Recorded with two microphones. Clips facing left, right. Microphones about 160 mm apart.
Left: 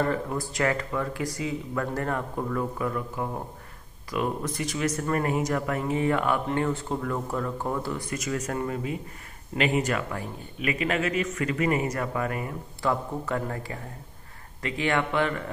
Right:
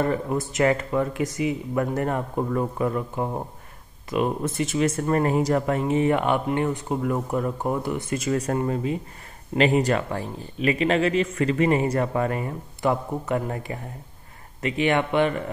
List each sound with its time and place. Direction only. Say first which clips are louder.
0.0 s speech: right 3 dB; 20° right (ahead or behind)